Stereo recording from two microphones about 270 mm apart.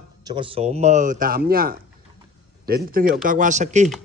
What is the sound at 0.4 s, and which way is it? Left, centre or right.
Speech, right.